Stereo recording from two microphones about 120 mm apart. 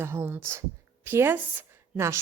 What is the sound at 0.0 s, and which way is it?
A woman's voice, 20° right (ahead or behind).